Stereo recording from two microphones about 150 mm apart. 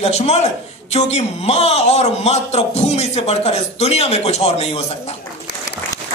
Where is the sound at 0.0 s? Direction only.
45° left (ahead or behind).